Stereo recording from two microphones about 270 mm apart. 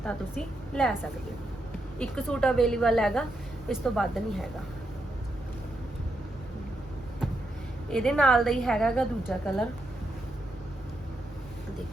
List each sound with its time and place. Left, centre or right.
0.0 s a woman's voice: centre
2.0 s a woman's voice: centre
7.9 s a woman's voice: centre